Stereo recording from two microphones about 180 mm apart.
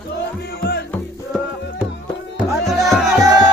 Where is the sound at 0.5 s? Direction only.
60° left (ahead or behind).